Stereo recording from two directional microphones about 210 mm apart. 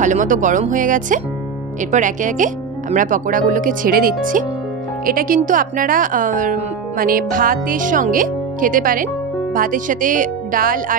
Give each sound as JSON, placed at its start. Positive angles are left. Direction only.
{"t": 0.0, "sound": "speech", "side_deg": -35}